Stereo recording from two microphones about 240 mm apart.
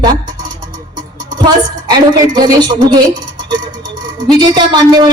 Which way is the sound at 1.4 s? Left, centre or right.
Centre.